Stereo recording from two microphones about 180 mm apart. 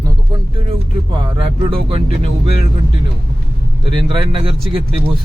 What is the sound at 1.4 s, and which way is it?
Speech, 30° right (ahead or behind).